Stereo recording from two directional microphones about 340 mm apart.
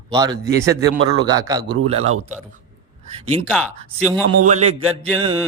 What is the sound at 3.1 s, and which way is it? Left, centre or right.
Speech, centre.